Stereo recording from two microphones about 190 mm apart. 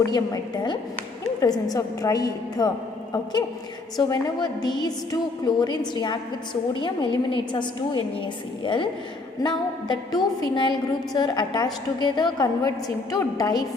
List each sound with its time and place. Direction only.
0.0 s a woman's voice: 20° left (ahead or behind)
3.9 s a woman's voice: 20° left (ahead or behind)